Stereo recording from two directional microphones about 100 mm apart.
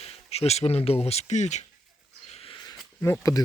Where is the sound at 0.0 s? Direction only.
90° left.